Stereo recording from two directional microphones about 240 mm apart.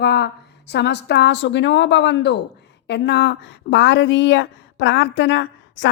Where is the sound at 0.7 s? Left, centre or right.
Left.